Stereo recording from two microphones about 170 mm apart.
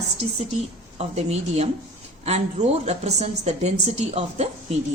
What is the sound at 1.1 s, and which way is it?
A woman's voice, 40° right (ahead or behind).